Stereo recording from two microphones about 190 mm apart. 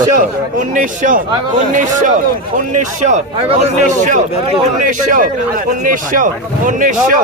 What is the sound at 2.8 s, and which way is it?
A man's voice, 40° right (ahead or behind).